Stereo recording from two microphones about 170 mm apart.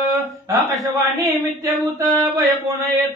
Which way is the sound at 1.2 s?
20° right (ahead or behind).